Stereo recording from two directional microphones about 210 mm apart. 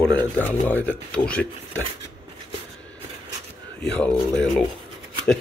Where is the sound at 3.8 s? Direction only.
5° left (ahead or behind).